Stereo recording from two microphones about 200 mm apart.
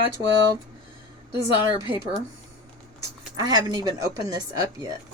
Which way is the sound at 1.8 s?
15° right (ahead or behind).